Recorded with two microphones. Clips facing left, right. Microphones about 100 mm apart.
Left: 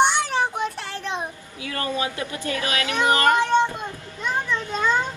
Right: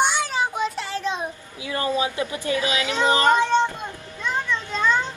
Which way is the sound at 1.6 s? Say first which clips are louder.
Right 3 dB; 20° right (ahead or behind).